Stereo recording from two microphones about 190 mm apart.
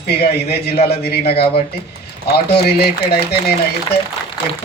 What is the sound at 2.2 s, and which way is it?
Speech, 55° left (ahead or behind).